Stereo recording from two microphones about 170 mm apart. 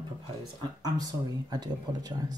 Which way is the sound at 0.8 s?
25° right (ahead or behind).